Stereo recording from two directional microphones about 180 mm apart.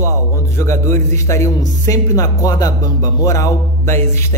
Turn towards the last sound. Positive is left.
turn(degrees=15)  # may be behind; listen again after turning